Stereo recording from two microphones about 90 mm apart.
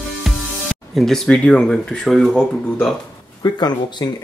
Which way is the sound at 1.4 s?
10° left (ahead or behind).